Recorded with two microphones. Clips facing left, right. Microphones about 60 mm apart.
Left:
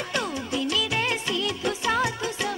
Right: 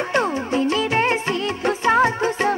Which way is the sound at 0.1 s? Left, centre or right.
Right.